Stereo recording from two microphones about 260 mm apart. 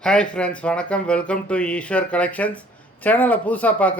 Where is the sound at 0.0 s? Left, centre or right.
Centre.